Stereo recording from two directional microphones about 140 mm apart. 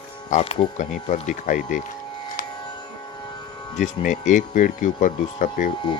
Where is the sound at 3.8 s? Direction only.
60° left (ahead or behind).